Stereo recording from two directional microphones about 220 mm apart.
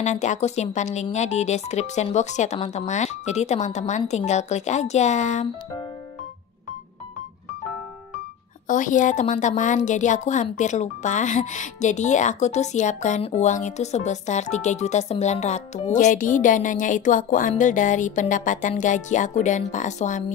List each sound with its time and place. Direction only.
0.0 s a woman's voice: 35° left (ahead or behind)
8.6 s a woman's voice: 35° left (ahead or behind)